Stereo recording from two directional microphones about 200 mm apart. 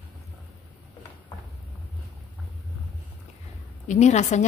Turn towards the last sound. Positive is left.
turn(degrees=35)  # may be behind; listen again after turning